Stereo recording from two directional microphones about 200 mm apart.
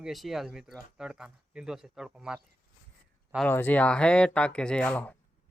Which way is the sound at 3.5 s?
10° left (ahead or behind).